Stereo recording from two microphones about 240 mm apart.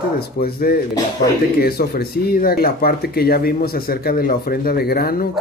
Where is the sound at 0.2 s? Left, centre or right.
Left.